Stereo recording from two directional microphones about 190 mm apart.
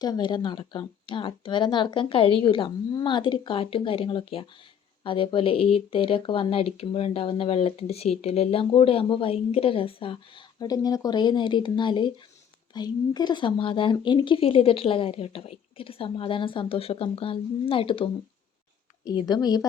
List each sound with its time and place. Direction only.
0.0 s speech: 20° left (ahead or behind)
19.3 s speech: 20° left (ahead or behind)